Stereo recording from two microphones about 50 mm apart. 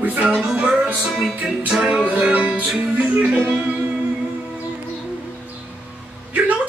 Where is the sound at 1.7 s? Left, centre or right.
Centre.